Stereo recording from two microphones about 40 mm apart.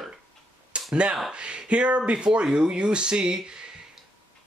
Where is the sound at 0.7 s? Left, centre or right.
Right.